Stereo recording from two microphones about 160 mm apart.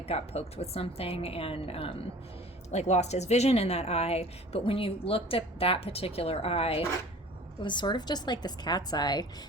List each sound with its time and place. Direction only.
0.1 s a woman's voice: 40° left (ahead or behind)